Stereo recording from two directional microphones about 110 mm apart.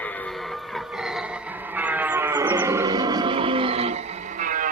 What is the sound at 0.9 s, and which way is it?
Music, 5° right (ahead or behind).